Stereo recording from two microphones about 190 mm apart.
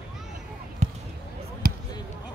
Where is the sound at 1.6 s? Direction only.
50° right (ahead or behind).